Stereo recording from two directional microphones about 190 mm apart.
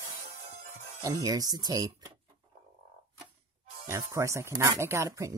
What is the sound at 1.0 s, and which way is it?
Speech, 20° right (ahead or behind).